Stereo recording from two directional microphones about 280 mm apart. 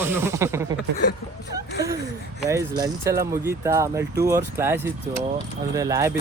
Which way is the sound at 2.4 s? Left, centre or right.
Centre.